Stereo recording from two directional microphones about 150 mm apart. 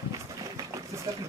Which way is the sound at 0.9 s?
20° right (ahead or behind).